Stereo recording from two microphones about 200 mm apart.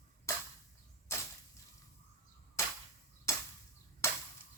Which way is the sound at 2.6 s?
15° left (ahead or behind).